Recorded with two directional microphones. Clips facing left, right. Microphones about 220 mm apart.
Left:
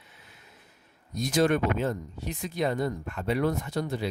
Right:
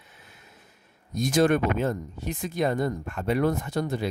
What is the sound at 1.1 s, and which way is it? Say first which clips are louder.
Speech: right 3 dB; 50° right (ahead or behind).